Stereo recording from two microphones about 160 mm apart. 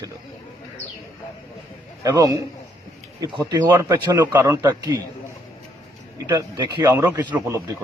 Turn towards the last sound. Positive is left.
turn(degrees=-15)  # may be behind; listen again after turning